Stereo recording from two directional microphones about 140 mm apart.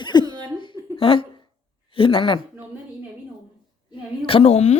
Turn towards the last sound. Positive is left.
turn(degrees=50)  # may be behind; listen again after turning